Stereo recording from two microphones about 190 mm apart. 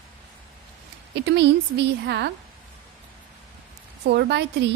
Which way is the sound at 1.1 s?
65° right (ahead or behind).